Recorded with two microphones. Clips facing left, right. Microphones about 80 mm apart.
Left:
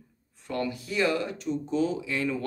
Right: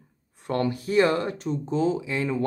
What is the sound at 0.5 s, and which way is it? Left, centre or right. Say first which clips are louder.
Speech: right 6 dB; right.